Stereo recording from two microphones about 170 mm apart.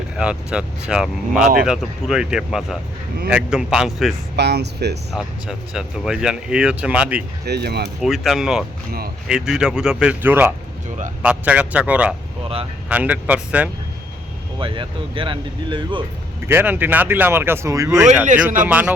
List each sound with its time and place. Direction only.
0.2 s speech: 5° right (ahead or behind)
4.4 s speech: 80° right
5.1 s speech: 5° right (ahead or behind)
7.4 s speech: 70° right (ahead or behind)
8.0 s speech: centre (ahead or behind)
14.6 s speech: 30° right (ahead or behind)
16.5 s speech: 10° right (ahead or behind)